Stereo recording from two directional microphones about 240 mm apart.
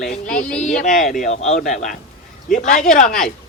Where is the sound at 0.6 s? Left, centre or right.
Left.